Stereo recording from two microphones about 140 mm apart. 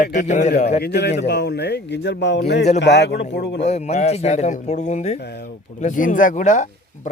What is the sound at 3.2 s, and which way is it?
A man's voice, 55° left (ahead or behind).